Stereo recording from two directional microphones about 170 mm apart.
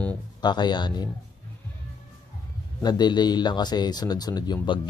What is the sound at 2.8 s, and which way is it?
Speech, 25° left (ahead or behind).